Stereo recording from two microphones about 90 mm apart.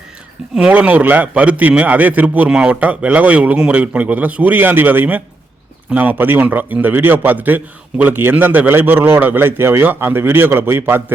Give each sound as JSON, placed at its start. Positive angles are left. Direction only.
{"t": 0.7, "sound": "a man's voice", "side_deg": -20}